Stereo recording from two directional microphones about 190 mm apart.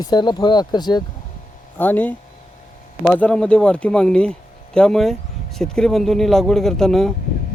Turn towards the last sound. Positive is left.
turn(degrees=0)  # may be behind; listen again after turning